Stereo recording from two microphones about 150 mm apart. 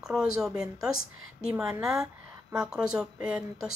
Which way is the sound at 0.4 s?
5° right (ahead or behind).